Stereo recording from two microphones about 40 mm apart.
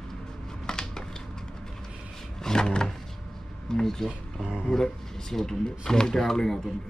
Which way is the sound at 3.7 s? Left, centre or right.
Centre.